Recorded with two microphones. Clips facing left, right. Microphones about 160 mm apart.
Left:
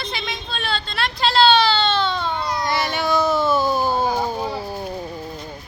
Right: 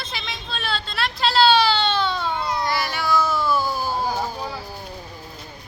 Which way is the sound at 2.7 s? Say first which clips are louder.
Left 4 dB; 20° left (ahead or behind).